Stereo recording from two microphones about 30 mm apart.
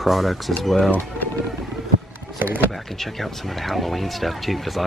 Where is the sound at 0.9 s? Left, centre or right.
Left.